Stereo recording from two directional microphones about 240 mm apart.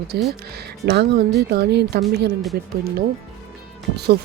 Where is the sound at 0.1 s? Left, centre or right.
Right.